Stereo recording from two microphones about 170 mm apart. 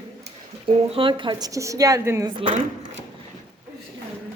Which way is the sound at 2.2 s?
30° right (ahead or behind).